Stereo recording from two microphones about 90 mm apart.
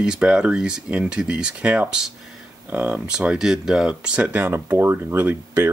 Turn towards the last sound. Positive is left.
turn(degrees=-25)  # may be behind; listen again after turning